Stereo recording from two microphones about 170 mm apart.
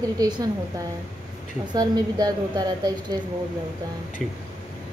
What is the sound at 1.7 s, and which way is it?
A woman's voice, 25° right (ahead or behind).